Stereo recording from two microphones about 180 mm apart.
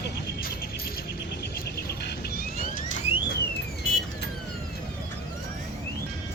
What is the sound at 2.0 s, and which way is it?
Vehicle, 65° left (ahead or behind).